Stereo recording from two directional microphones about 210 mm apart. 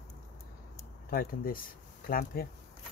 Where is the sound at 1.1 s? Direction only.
45° left (ahead or behind).